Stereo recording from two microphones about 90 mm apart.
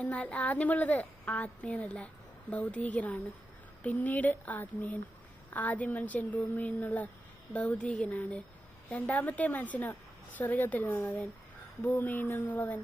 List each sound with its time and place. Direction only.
0.0 s a woman's voice: 15° left (ahead or behind)
11.8 s music: 20° left (ahead or behind)